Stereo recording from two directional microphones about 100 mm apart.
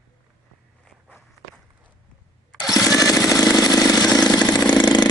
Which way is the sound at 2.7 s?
35° left (ahead or behind).